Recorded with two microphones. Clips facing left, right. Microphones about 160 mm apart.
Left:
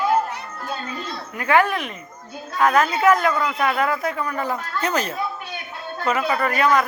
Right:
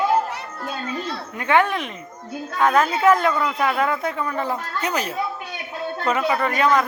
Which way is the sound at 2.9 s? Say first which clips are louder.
Even; 30° right (ahead or behind).